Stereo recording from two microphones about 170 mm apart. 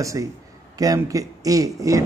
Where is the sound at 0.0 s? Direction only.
20° right (ahead or behind).